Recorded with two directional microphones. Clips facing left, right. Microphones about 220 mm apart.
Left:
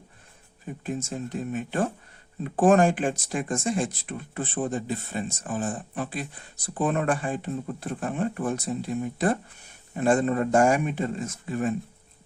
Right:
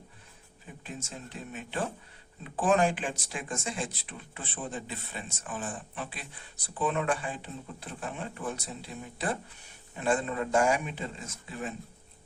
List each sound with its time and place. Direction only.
0.9 s speech: 45° left (ahead or behind)